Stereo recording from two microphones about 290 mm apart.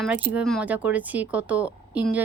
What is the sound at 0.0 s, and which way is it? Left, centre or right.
Speech, centre.